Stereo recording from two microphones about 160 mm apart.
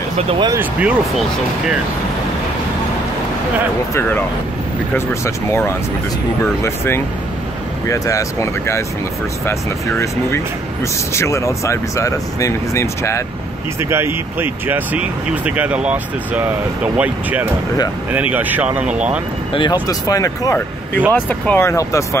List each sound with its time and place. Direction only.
0.5 s speech: 10° right (ahead or behind)
3.9 s speech: 10° left (ahead or behind)
13.7 s speech: 15° right (ahead or behind)
19.5 s speech: 30° left (ahead or behind)